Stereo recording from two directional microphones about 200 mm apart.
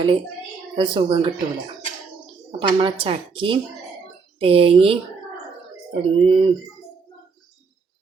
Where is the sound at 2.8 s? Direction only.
25° right (ahead or behind).